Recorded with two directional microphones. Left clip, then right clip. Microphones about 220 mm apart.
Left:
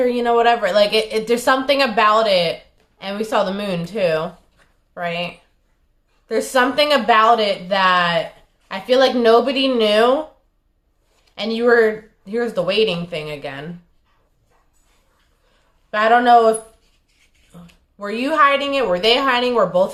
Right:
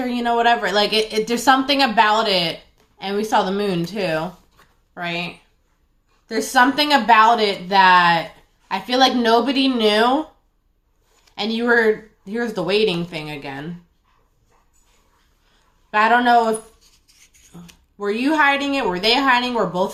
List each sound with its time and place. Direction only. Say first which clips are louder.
0.0 s a woman's voice: left 3 dB; 5° left (ahead or behind)
6.2 s a woman's voice: right 1 dB; 5° left (ahead or behind)
11.3 s a woman's voice: left 3 dB; 5° left (ahead or behind)
15.9 s a woman's voice: left 2 dB; 5° left (ahead or behind)
17.2 s beatboxing: even; 50° right (ahead or behind)
18.0 s a woman's voice: left 2 dB; 10° left (ahead or behind)